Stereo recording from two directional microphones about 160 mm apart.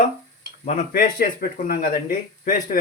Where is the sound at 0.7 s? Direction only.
55° left (ahead or behind).